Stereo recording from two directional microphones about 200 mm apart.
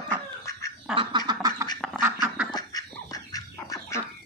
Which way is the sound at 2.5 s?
20° left (ahead or behind).